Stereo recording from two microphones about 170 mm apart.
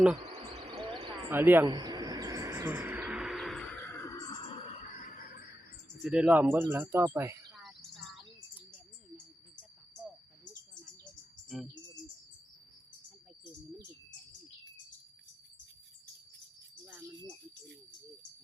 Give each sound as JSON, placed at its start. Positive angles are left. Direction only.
{"t": 0.2, "sound": "a sound", "side_deg": -25}
{"t": 1.3, "sound": "speech", "side_deg": -10}
{"t": 1.6, "sound": "a sound", "side_deg": -25}
{"t": 6.0, "sound": "speech", "side_deg": -5}
{"t": 7.5, "sound": "chirp", "side_deg": 0}
{"t": 11.4, "sound": "speech", "side_deg": 0}